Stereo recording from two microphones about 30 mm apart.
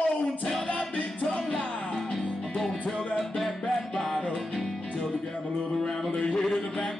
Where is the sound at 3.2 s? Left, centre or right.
Centre.